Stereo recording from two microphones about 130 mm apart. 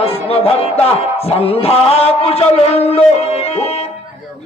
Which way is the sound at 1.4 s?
50° left (ahead or behind).